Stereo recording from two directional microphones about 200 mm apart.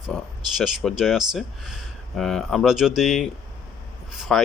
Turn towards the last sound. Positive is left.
turn(degrees=0)  # may be behind; listen again after turning